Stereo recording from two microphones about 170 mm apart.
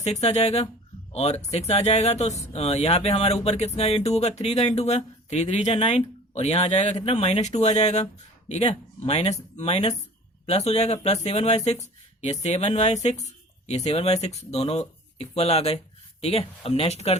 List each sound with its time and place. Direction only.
0.0 s speech: 40° left (ahead or behind)